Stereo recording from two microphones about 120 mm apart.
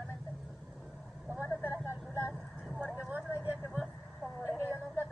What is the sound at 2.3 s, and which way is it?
Vehicle, centre (ahead or behind).